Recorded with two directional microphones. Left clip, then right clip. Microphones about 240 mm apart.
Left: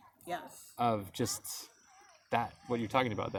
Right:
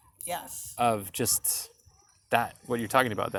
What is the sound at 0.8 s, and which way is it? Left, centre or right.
Speech, centre.